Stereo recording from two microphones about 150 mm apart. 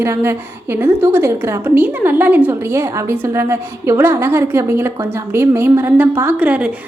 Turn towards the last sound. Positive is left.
turn(degrees=-10)  # may be behind; listen again after turning